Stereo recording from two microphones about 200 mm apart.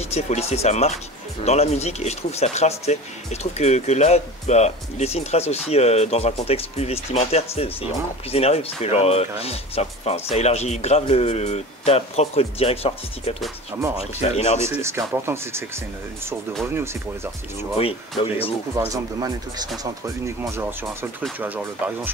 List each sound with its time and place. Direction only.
0.1 s speech: 30° left (ahead or behind)
14.7 s speech: 15° right (ahead or behind)
16.6 s speech: 15° right (ahead or behind)
19.8 s speech: 15° right (ahead or behind)